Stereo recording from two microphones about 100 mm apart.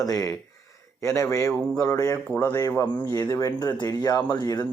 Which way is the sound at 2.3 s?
20° left (ahead or behind).